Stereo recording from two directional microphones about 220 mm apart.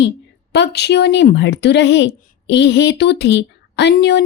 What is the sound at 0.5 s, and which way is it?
A woman's voice, 50° left (ahead or behind).